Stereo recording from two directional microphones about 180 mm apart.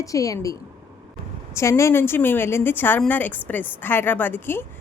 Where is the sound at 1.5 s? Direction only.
15° left (ahead or behind).